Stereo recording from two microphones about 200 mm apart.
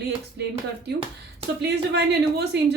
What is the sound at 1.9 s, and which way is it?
Speech, 55° right (ahead or behind).